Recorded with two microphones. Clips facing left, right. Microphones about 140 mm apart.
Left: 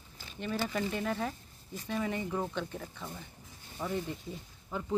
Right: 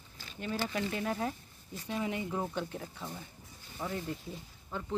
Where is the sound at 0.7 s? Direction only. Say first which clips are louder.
Left 1 dB; 5° right (ahead or behind).